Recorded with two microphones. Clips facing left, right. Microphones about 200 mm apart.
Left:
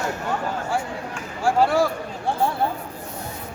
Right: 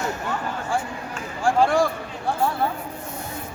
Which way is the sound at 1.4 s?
5° left (ahead or behind).